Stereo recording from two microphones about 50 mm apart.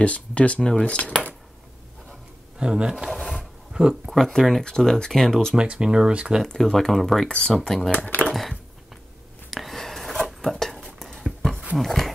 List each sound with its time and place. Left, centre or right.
0.0 s speech: left
0.6 s speech: centre
2.6 s speech: centre
3.1 s a sound: centre
3.3 s a sound: centre
4.4 s speech: centre
5.6 s speech: centre
6.6 s speech: centre
7.2 s speech: centre
7.5 s speech: centre
8.3 s a sound: centre
11.7 s dog: centre